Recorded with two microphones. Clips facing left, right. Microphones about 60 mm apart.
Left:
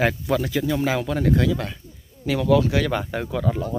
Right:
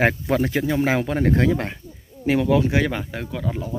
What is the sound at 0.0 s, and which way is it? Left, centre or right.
Speech, right.